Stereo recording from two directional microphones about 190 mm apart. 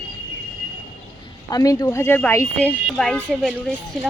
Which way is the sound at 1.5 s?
20° left (ahead or behind).